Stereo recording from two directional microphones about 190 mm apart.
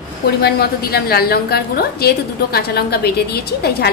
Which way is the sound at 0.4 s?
55° left (ahead or behind).